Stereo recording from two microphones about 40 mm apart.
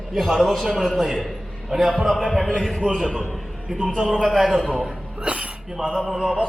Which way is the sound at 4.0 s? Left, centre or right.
Centre.